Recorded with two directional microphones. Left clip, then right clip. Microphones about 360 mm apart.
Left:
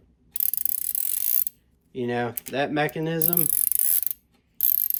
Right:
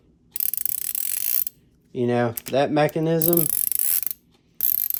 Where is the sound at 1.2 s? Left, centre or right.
Centre.